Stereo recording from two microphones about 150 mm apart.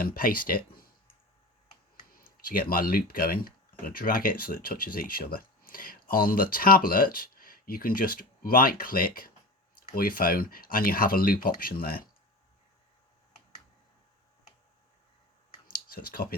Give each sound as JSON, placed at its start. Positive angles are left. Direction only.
{"t": 0.0, "sound": "speech", "side_deg": 70}
{"t": 2.1, "sound": "speech", "side_deg": 70}
{"t": 15.7, "sound": "a sound", "side_deg": 75}